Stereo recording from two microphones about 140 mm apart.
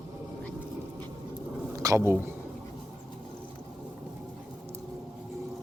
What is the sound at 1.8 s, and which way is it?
Speech, 20° right (ahead or behind).